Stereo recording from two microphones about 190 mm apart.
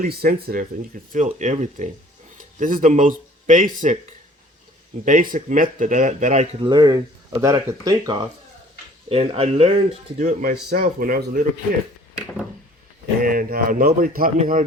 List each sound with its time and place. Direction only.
0.0 s speech: 50° right (ahead or behind)
1.1 s speech: 40° right (ahead or behind); by 8.3 s 20° right (ahead or behind)
9.0 s speech: 30° right (ahead or behind); by 11.8 s 50° right (ahead or behind)
13.2 s speech: 50° right (ahead or behind)